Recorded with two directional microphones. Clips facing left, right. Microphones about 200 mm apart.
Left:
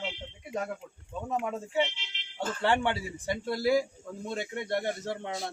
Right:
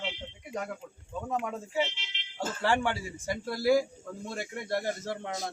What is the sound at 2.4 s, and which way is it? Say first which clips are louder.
A man's voice: left 1 dB; centre (ahead or behind).